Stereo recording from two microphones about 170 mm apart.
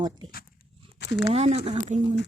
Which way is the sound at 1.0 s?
90° left.